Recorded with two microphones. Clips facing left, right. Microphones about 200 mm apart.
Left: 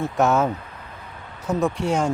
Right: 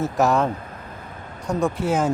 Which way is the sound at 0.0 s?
Centre (ahead or behind).